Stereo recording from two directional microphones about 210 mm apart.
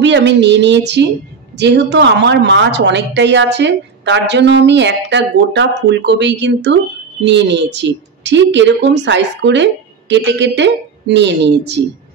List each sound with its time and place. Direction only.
0.0 s a woman's voice: 55° right (ahead or behind)